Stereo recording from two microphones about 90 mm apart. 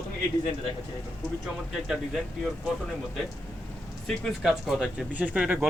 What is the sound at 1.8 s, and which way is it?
Speech, 5° right (ahead or behind).